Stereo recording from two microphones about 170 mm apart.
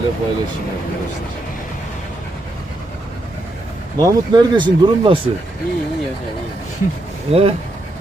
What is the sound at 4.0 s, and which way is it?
Speech, 20° right (ahead or behind).